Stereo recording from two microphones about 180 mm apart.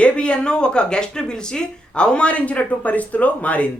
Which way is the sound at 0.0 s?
5° left (ahead or behind).